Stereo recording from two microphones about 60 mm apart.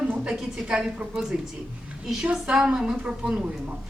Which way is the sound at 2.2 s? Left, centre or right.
Centre.